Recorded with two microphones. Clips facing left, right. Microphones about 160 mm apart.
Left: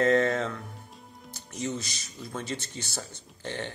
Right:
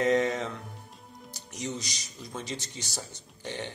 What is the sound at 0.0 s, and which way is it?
Speech, 15° right (ahead or behind).